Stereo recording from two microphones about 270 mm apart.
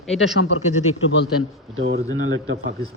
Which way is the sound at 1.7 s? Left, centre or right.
Right.